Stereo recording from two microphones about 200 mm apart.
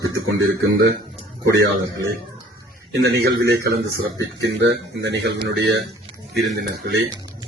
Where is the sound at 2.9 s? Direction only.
55° right (ahead or behind).